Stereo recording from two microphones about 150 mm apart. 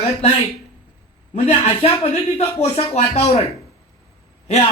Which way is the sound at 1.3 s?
40° left (ahead or behind).